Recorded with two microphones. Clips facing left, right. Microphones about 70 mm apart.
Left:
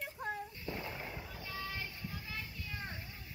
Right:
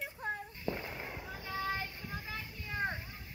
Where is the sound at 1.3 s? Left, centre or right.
Right.